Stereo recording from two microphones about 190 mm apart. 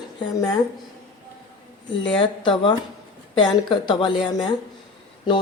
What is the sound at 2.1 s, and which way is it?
Speech, 25° left (ahead or behind).